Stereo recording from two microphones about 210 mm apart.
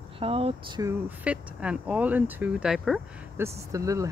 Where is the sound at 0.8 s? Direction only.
10° right (ahead or behind).